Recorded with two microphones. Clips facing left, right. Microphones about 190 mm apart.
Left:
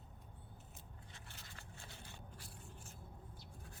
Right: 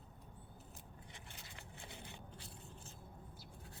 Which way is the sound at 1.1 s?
15° right (ahead or behind).